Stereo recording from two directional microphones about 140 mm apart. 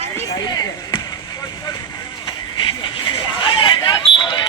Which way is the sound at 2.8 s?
35° left (ahead or behind).